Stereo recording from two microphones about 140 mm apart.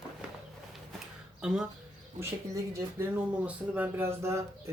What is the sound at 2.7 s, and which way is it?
Speech, 15° right (ahead or behind).